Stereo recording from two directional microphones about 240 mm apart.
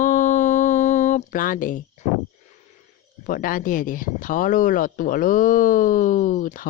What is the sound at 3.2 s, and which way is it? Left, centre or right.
Speech, left.